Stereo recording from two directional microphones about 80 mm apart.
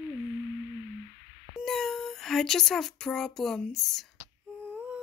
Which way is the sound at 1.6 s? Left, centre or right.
Centre.